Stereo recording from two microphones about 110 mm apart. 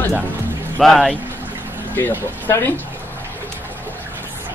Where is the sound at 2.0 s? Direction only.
20° left (ahead or behind).